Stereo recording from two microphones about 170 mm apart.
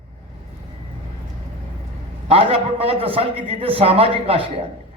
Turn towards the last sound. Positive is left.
turn(degrees=-35)  # may be behind; listen again after turning